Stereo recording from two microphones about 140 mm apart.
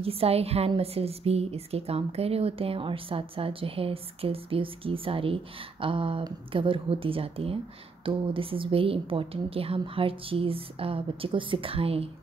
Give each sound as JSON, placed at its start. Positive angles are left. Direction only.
{"t": 0.0, "sound": "a woman's voice", "side_deg": -45}